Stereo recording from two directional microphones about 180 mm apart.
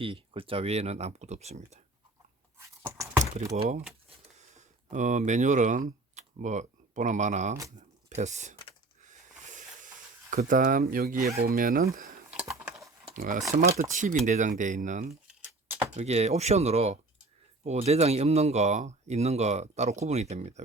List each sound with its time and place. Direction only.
0.0 s speech: 30° right (ahead or behind)
2.6 s a sound: 15° right (ahead or behind)
3.5 s speech: 40° right (ahead or behind)
9.0 s a sound: 45° right (ahead or behind)
10.3 s speech: 45° right (ahead or behind)
12.3 s typing: 5° right (ahead or behind)
13.1 s speech: 45° right (ahead or behind)